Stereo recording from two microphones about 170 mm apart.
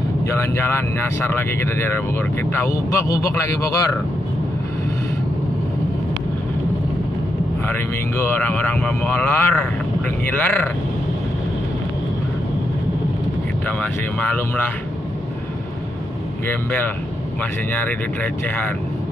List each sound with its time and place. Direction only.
0.3 s speech: 15° left (ahead or behind)
7.6 s speech: 10° left (ahead or behind)
13.7 s speech: 10° left (ahead or behind)
16.4 s speech: 10° left (ahead or behind)